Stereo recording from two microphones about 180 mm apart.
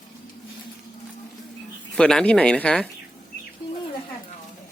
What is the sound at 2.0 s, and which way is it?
Speech, 5° left (ahead or behind).